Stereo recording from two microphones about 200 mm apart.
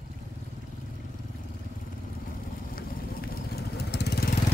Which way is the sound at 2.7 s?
50° left (ahead or behind).